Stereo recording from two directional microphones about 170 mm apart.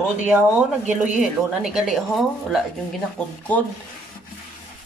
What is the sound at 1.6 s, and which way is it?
A woman's voice, centre (ahead or behind).